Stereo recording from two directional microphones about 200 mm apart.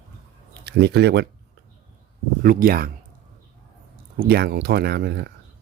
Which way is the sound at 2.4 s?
50° right (ahead or behind).